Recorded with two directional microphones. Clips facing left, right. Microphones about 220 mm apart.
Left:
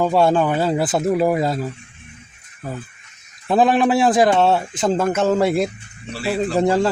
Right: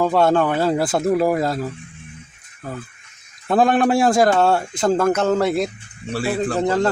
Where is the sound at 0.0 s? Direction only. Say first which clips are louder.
Even; 5° left (ahead or behind).